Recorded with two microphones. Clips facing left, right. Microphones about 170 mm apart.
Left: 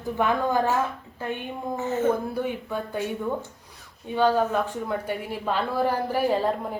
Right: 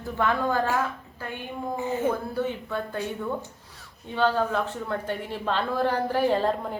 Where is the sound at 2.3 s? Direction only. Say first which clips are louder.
Even; 15° left (ahead or behind).